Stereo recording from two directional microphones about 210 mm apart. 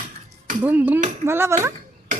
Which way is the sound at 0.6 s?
10° right (ahead or behind).